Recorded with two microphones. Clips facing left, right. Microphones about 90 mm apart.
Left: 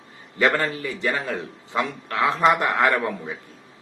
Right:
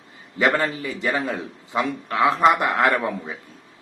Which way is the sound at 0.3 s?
10° right (ahead or behind).